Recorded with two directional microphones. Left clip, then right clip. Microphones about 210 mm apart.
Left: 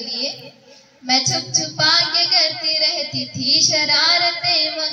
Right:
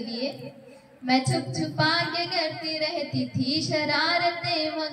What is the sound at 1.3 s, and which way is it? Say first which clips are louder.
Music: left 8 dB; 25° left (ahead or behind).